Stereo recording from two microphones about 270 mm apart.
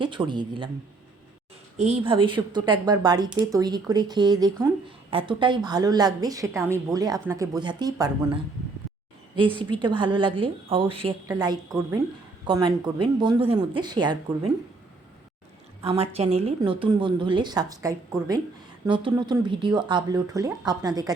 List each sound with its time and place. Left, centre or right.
0.0 s speech: centre
1.8 s speech: right
15.8 s speech: right